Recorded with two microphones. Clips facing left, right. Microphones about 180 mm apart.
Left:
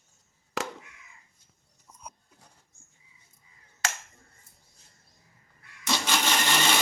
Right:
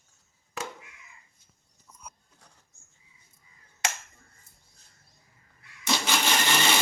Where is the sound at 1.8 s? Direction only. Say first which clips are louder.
Left 2 dB; 20° left (ahead or behind).